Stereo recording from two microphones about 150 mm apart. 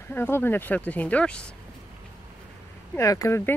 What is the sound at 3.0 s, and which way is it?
Speech, 20° left (ahead or behind).